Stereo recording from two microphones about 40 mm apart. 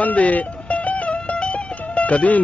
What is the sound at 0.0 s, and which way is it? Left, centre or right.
Music, left.